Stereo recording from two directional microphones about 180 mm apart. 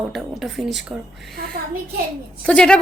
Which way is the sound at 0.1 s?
Centre (ahead or behind).